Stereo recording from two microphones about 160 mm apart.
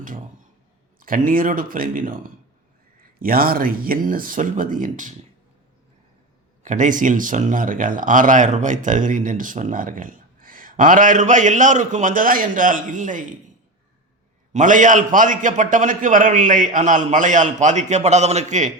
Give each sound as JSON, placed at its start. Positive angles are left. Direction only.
{"t": 0.9, "sound": "speech", "side_deg": -60}
{"t": 6.6, "sound": "speech", "side_deg": -50}
{"t": 14.5, "sound": "a man's voice", "side_deg": -55}